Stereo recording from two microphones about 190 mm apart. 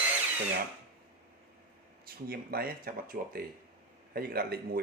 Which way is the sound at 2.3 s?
50° right (ahead or behind).